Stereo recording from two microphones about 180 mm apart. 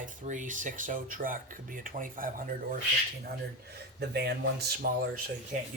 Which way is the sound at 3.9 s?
65° right (ahead or behind).